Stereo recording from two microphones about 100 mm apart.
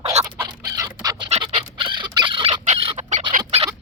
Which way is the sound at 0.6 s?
40° right (ahead or behind).